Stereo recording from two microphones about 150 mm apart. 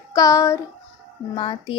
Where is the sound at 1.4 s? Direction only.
35° left (ahead or behind).